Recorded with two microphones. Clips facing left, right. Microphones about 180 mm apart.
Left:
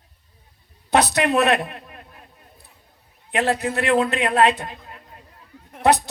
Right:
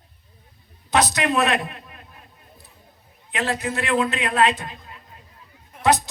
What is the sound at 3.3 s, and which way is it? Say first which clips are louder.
A man's voice: left 4 dB; 60° left (ahead or behind).